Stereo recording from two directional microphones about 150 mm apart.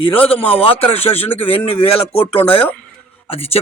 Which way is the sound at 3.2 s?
40° left (ahead or behind).